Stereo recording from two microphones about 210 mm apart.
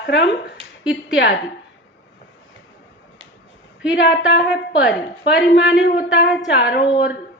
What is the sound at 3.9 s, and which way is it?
A woman's voice, 60° left (ahead or behind).